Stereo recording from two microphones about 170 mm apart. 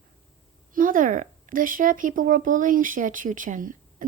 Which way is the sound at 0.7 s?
55° right (ahead or behind).